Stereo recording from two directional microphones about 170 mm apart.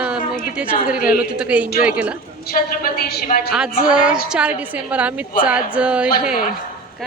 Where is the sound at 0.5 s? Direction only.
5° right (ahead or behind).